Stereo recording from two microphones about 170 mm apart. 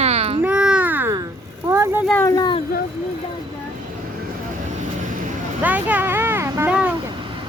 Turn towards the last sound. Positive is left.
turn(degrees=-10)  # may be behind; listen again after turning